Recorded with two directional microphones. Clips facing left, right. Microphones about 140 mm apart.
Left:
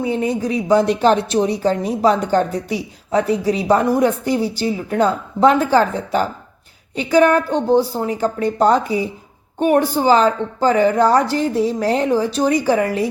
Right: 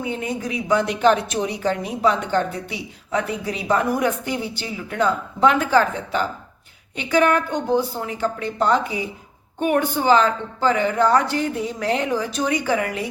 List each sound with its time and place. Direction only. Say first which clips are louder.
0.0 s a woman's voice: left 7 dB; 35° left (ahead or behind)